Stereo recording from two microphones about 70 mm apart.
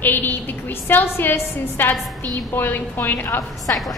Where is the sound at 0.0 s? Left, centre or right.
Left.